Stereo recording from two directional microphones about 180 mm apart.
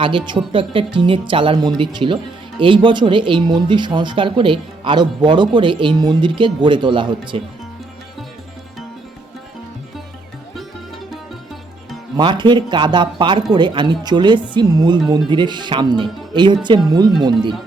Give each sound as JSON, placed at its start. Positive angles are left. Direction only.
{"t": 0.0, "sound": "speech", "side_deg": -25}
{"t": 12.1, "sound": "speech", "side_deg": -25}